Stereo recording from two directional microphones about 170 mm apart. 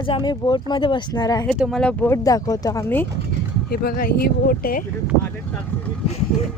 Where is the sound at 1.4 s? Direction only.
Centre (ahead or behind).